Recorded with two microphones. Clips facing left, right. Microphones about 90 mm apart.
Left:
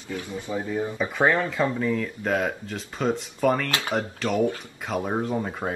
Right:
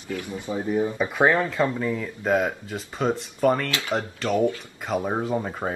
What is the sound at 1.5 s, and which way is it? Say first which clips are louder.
Speech: even; centre (ahead or behind).